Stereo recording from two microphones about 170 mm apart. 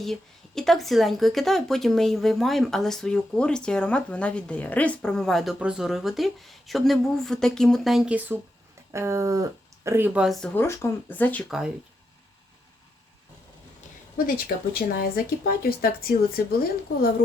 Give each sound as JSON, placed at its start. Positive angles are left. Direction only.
{"t": 0.0, "sound": "speech", "side_deg": 0}
{"t": 10.2, "sound": "speech", "side_deg": 0}
{"t": 10.5, "sound": "speech", "side_deg": 15}
{"t": 14.3, "sound": "speech", "side_deg": 60}